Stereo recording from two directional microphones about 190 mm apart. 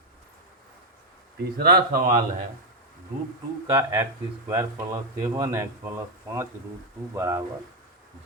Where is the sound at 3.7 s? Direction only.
15° right (ahead or behind).